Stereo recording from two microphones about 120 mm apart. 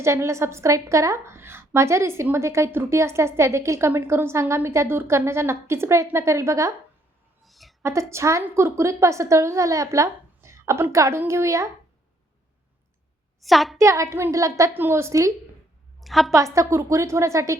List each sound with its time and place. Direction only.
0.0 s a woman's voice: 25° right (ahead or behind)
7.4 s a sound: centre (ahead or behind)
7.8 s a woman's voice: 25° right (ahead or behind)
13.4 s a woman's voice: centre (ahead or behind)
13.7 s a woman's voice: 25° right (ahead or behind)
16.0 s a woman's voice: centre (ahead or behind)
16.3 s a woman's voice: 25° right (ahead or behind)